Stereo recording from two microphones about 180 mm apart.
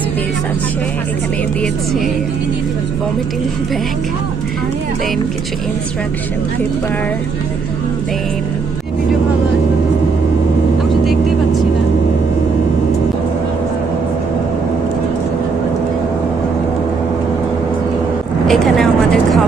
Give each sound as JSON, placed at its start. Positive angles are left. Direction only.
{"t": 11.0, "sound": "vehicle", "side_deg": 0}
{"t": 18.4, "sound": "vehicle", "side_deg": 0}